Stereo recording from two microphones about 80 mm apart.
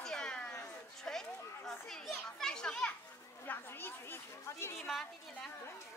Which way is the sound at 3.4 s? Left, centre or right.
Left.